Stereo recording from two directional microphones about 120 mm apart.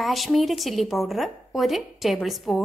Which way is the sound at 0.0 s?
Centre (ahead or behind).